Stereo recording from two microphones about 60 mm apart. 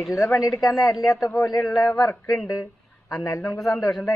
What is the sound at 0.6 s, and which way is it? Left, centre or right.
A man's voice, left.